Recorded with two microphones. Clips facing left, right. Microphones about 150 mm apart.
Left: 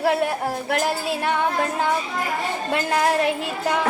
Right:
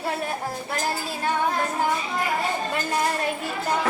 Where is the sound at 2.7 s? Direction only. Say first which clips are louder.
Left 4 dB; 90° left.